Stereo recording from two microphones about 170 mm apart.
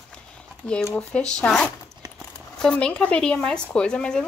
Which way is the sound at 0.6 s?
5° left (ahead or behind).